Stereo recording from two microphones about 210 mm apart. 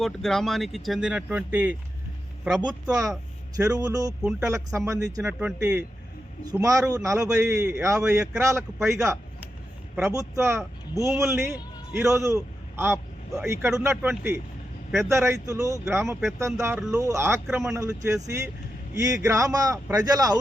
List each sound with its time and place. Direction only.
0.0 s speech: centre (ahead or behind)
2.8 s speech: 15° right (ahead or behind)
4.2 s speech: centre (ahead or behind)
4.4 s speech: 15° right (ahead or behind)
6.4 s speech: 15° right (ahead or behind)
7.2 s speech: 5° right (ahead or behind)
7.4 s a man's voice: 15° right (ahead or behind)
17.4 s speech: centre (ahead or behind)
17.7 s speech: 15° right (ahead or behind)